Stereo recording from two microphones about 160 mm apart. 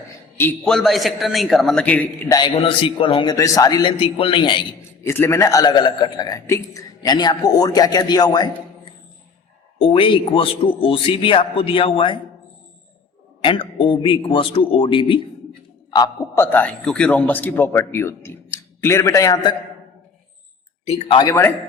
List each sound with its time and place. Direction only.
0.6 s a man's voice: 5° left (ahead or behind)
2.3 s a man's voice: 30° left (ahead or behind)
3.3 s a man's voice: 20° left (ahead or behind)
5.0 s a man's voice: 15° left (ahead or behind); by 12.1 s 35° left (ahead or behind)
13.4 s a man's voice: 35° left (ahead or behind)
16.4 s a man's voice: 10° left (ahead or behind)
20.8 s speech: 45° left (ahead or behind)
21.2 s a man's voice: 20° left (ahead or behind)